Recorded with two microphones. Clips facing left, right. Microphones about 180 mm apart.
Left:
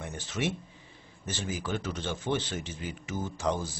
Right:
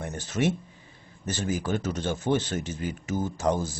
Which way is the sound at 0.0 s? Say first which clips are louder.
Right 6 dB; 45° right (ahead or behind).